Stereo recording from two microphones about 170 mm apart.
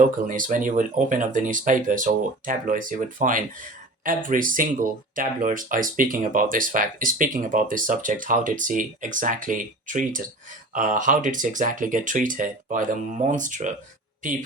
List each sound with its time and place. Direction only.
0.3 s speech: 50° right (ahead or behind)